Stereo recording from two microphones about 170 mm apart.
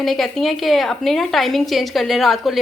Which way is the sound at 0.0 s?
Centre (ahead or behind).